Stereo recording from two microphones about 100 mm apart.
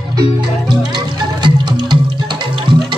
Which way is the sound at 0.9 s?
45° right (ahead or behind).